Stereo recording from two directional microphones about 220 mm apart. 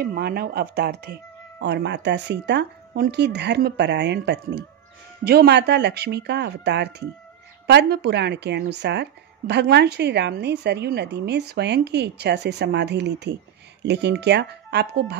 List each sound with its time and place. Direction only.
0.0 s speech: 45° right (ahead or behind)